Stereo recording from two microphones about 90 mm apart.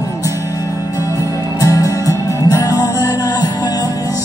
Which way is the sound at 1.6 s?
40° left (ahead or behind).